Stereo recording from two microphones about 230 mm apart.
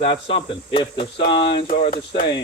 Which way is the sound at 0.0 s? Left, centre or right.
Left.